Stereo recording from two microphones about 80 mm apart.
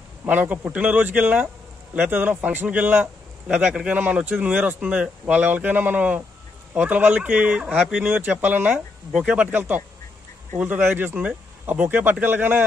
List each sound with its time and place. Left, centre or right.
0.2 s speech: right
3.4 s speech: centre
8.0 s speech: centre
8.7 s speech: centre